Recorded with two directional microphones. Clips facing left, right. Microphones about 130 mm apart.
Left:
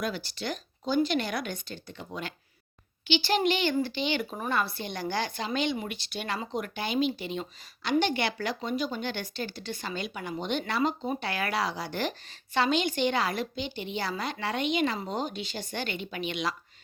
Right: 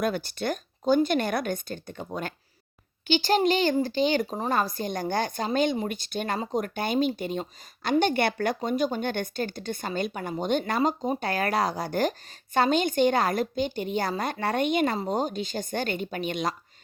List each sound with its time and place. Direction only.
0.0 s speech: 50° right (ahead or behind)
3.1 s speech: 45° right (ahead or behind)